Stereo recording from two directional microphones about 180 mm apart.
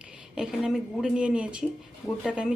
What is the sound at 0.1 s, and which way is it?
Speech, 5° right (ahead or behind).